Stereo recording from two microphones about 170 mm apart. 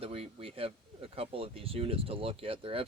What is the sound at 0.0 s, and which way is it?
Speech, 35° right (ahead or behind).